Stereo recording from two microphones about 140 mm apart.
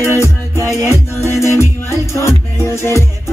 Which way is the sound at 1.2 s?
20° left (ahead or behind).